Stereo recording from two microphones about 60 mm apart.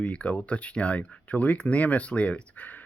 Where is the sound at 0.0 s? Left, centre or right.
Left.